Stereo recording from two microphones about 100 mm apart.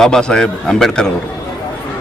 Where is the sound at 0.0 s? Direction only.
5° left (ahead or behind).